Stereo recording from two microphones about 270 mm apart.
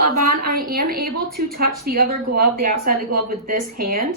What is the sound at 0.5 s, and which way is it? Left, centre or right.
A woman's voice, right.